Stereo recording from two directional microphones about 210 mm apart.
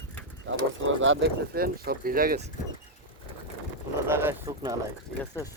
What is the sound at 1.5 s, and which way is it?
Speech, 45° right (ahead or behind).